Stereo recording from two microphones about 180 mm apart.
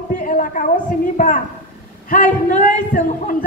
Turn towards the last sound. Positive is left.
turn(degrees=50)  # may be behind; listen again after turning